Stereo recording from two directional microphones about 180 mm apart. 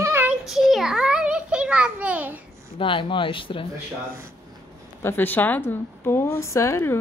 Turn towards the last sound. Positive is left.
turn(degrees=15)  # may be behind; listen again after turning